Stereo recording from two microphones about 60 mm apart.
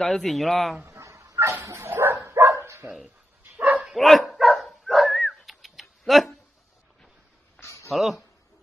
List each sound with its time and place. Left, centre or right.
0.0 s speech: centre
0.8 s dog: right
3.5 s dog: right
3.9 s dog: centre
7.6 s a sound: left
7.9 s speech: centre